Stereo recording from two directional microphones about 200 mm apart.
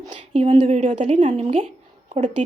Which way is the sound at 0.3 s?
30° right (ahead or behind).